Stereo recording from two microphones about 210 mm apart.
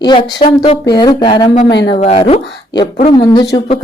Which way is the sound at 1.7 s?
55° left (ahead or behind).